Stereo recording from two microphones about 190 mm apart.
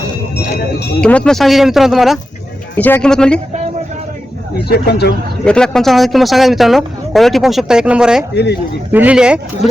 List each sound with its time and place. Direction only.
1.0 s speech: 5° left (ahead or behind)
4.7 s speech: 60° left (ahead or behind)
5.5 s speech: 5° left (ahead or behind)